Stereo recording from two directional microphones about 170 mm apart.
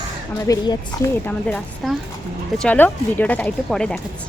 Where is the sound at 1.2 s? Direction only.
5° left (ahead or behind).